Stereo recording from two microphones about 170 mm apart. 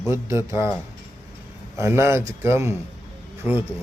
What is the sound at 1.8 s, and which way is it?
Speech, 15° right (ahead or behind).